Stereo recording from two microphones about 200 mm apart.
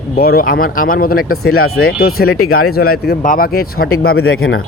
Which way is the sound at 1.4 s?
90° left.